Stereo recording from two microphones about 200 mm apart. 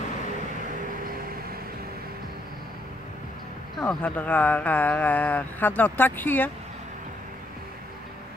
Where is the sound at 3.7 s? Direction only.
5° left (ahead or behind).